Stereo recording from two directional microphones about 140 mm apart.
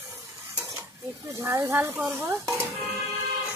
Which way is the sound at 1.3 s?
20° right (ahead or behind).